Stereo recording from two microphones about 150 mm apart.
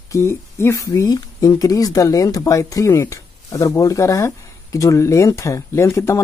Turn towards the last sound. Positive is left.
turn(degrees=20)  # may be behind; listen again after turning